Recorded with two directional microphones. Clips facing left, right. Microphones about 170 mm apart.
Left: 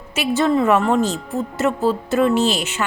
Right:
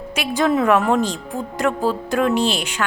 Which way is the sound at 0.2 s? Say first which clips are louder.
Left 1 dB; centre (ahead or behind).